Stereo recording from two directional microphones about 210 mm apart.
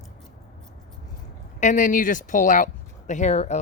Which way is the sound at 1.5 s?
35° left (ahead or behind).